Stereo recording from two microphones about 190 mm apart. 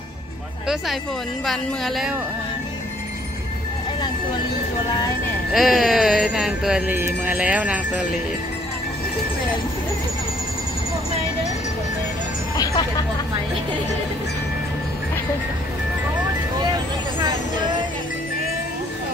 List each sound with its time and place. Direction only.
1.4 s speech: centre (ahead or behind)
5.5 s speech: centre (ahead or behind)
12.5 s music: 20° left (ahead or behind)